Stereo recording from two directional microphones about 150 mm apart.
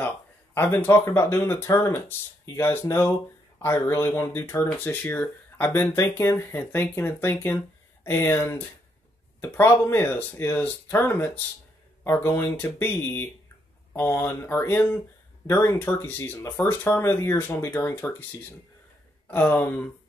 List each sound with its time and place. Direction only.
0.6 s speech: 15° left (ahead or behind)
19.2 s speech: 10° left (ahead or behind)